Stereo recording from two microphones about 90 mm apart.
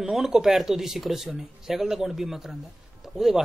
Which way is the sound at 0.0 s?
5° right (ahead or behind).